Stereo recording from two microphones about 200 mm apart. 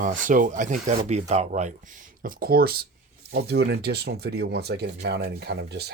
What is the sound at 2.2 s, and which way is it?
Speech, 50° right (ahead or behind).